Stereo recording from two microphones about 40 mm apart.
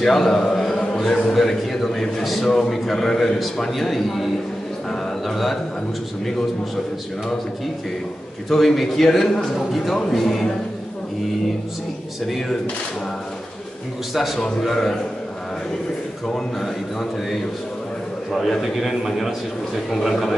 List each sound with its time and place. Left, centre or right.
0.0 s a man's voice: centre
0.5 s music: centre
1.3 s a man's voice: centre
8.5 s a man's voice: centre
9.6 s a man's voice: centre
12.3 s a man's voice: centre
14.1 s a man's voice: centre
14.7 s a man's voice: centre
16.6 s a man's voice: centre